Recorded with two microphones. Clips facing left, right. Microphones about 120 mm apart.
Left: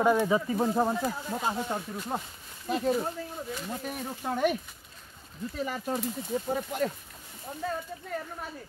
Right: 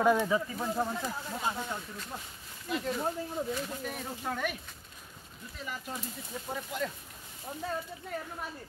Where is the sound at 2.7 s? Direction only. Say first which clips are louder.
Left 6 dB; 35° left (ahead or behind).